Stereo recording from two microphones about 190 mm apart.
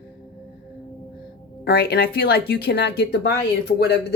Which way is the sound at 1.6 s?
55° left (ahead or behind).